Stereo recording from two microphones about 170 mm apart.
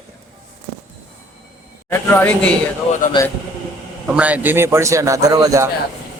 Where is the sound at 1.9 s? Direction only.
10° left (ahead or behind).